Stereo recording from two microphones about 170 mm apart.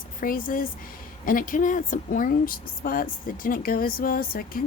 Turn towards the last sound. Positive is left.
turn(degrees=55)  # may be behind; listen again after turning